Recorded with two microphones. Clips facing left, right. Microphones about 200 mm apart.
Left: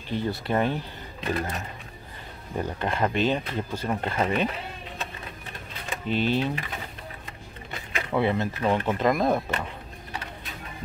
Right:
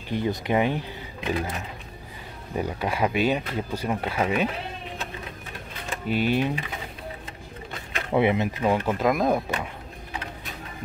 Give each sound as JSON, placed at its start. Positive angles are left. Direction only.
{"t": 0.1, "sound": "speech", "side_deg": -15}
{"t": 6.0, "sound": "speech", "side_deg": -10}
{"t": 8.1, "sound": "speech", "side_deg": -20}
{"t": 8.7, "sound": "speech", "side_deg": -5}